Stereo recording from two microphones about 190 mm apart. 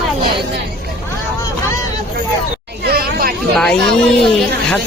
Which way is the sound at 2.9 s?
50° right (ahead or behind).